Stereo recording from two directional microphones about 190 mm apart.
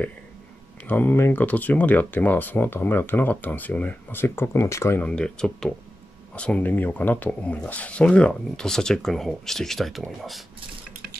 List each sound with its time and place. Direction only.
0.8 s speech: 10° left (ahead or behind)